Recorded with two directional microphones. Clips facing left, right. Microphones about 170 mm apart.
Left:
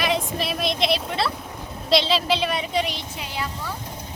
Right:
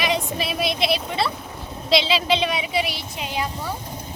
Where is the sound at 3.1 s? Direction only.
15° right (ahead or behind).